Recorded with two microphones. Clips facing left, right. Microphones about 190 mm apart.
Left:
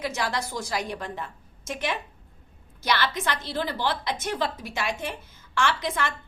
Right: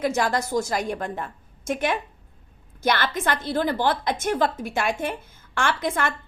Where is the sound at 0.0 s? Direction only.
50° right (ahead or behind).